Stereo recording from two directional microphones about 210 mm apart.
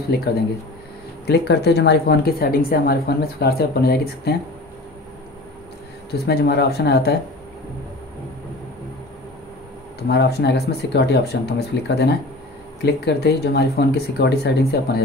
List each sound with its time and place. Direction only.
1.2 s speech: 50° left (ahead or behind)
6.2 s speech: 50° left (ahead or behind)
10.0 s speech: 50° left (ahead or behind)